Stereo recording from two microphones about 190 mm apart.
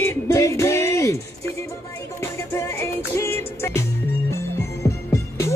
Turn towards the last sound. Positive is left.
turn(degrees=15)  # may be behind; listen again after turning